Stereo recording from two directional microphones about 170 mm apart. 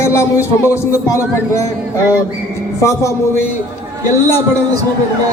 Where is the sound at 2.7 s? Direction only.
15° left (ahead or behind).